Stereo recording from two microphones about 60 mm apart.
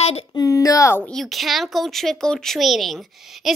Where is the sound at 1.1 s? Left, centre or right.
Centre.